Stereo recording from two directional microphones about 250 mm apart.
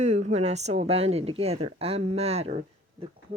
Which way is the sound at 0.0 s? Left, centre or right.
Right.